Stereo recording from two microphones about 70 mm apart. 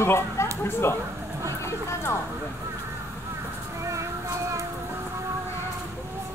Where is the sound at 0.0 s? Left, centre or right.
Left.